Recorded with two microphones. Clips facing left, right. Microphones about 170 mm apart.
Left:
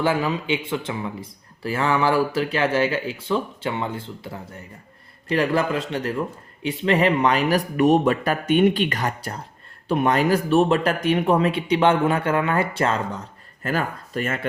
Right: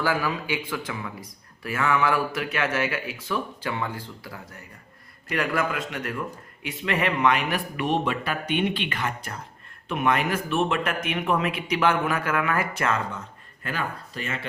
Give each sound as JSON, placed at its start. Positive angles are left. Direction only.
{"t": 0.0, "sound": "speech", "side_deg": 25}